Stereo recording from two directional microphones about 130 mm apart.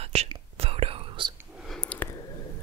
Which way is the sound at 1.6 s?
5° left (ahead or behind).